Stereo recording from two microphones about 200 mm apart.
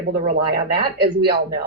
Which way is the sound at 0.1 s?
50° right (ahead or behind).